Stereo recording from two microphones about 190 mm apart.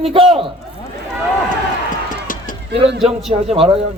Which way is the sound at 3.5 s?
35° right (ahead or behind).